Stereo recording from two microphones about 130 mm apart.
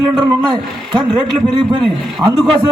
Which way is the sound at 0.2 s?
35° right (ahead or behind).